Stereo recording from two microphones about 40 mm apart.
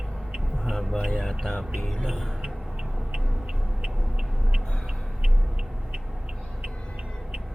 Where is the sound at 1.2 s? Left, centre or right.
Centre.